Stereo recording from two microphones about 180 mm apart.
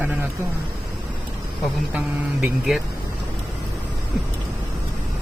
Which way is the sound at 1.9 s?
10° right (ahead or behind).